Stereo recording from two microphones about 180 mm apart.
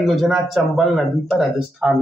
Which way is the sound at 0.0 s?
Centre (ahead or behind).